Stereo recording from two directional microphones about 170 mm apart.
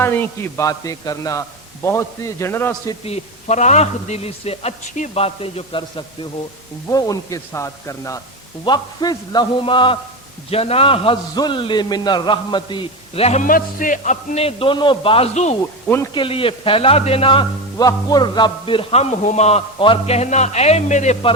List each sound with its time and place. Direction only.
0.0 s a man's voice: 15° left (ahead or behind)
3.1 s a man's voice: 40° left (ahead or behind)
6.9 s a man's voice: 20° left (ahead or behind); by 21.3 s 35° left (ahead or behind)